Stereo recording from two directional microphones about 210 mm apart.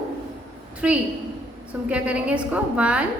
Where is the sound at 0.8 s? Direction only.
5° right (ahead or behind).